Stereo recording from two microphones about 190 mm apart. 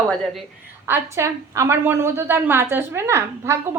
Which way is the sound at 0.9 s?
15° right (ahead or behind).